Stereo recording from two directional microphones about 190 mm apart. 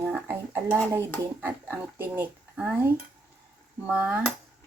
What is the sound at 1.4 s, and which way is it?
Speech, 10° right (ahead or behind).